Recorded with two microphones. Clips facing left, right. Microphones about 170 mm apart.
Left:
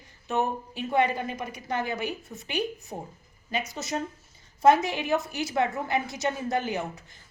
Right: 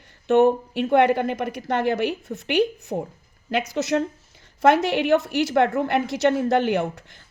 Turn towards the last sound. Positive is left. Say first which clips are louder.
# right 8 dB
turn(degrees=-70)  # may be behind; listen again after turning